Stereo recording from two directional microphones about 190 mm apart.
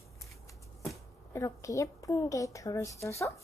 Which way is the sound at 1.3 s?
15° left (ahead or behind).